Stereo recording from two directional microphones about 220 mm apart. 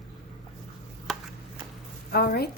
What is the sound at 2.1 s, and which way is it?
Speech, 45° left (ahead or behind).